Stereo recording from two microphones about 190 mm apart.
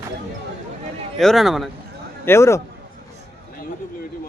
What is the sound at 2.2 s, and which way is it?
Speech, 15° left (ahead or behind).